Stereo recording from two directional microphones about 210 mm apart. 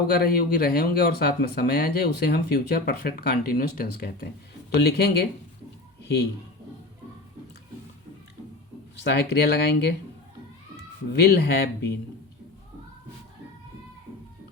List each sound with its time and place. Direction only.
0.1 s speech: 50° left (ahead or behind)
6.0 s a sound: 50° left (ahead or behind)
9.0 s speech: 50° left (ahead or behind)
11.1 s speech: 50° left (ahead or behind)